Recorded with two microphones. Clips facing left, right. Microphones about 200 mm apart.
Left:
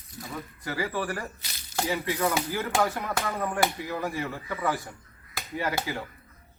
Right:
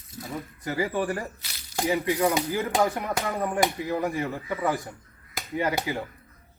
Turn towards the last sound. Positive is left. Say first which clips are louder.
# right 3 dB
turn(degrees=-15)  # may be behind; listen again after turning